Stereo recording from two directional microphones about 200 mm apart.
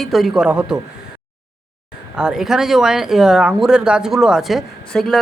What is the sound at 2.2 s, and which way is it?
Speech, 5° right (ahead or behind).